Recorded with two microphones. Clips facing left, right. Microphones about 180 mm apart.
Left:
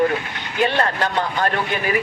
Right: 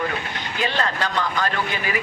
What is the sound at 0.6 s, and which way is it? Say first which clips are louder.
Speech: left 5 dB; 55° left (ahead or behind).